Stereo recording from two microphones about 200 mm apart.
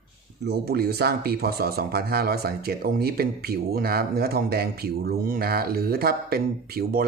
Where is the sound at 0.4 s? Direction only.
55° right (ahead or behind).